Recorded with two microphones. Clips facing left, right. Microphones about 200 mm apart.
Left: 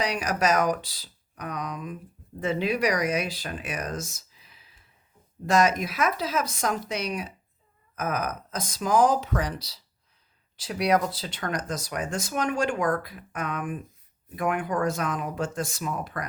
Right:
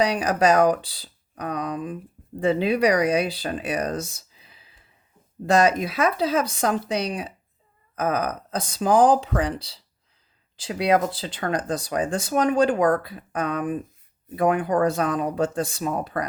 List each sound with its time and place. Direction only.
0.0 s speech: 30° right (ahead or behind)